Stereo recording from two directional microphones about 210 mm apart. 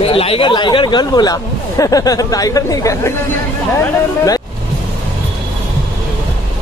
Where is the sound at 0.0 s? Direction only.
25° left (ahead or behind).